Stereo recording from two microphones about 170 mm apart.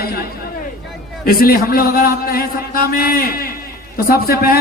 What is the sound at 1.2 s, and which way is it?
A man's voice, 60° left (ahead or behind).